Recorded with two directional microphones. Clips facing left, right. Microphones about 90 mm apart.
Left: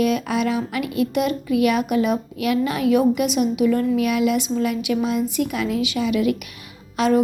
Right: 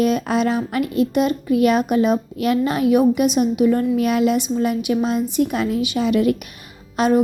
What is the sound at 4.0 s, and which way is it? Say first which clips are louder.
Child singing: right 2 dB; 35° right (ahead or behind).